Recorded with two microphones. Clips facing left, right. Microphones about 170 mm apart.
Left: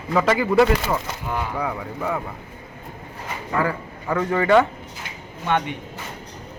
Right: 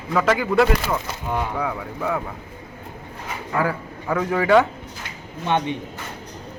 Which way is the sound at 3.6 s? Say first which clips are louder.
Even; 5° right (ahead or behind).